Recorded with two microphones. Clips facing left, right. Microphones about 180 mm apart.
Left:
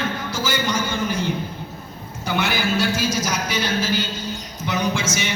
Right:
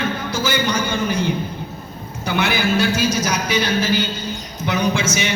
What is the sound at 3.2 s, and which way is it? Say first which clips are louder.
Speech: right 4 dB; 65° right (ahead or behind).